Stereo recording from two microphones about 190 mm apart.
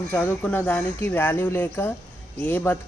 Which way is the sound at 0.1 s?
10° left (ahead or behind).